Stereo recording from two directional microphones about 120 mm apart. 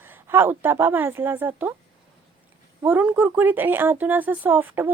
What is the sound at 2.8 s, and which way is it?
Speech, 15° right (ahead or behind).